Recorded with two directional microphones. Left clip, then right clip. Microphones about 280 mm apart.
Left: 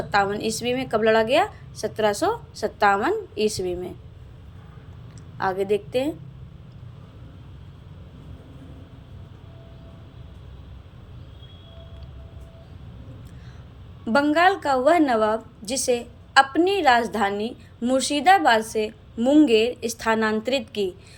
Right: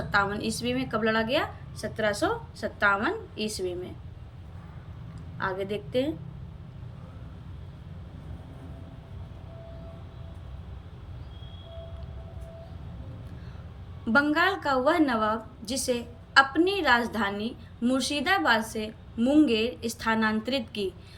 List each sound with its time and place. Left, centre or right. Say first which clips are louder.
0.1 s a woman's voice: left 4 dB; centre
5.4 s a woman's voice: left 8 dB; centre
14.0 s a woman's voice: left 5 dB; centre